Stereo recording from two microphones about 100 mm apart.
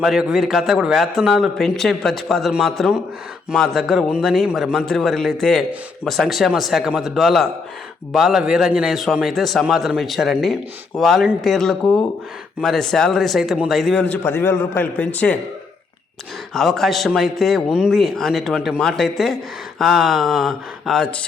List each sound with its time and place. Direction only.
0.0 s a man's voice: 5° right (ahead or behind)
14.0 s a man's voice: 20° left (ahead or behind)
16.6 s a man's voice: centre (ahead or behind)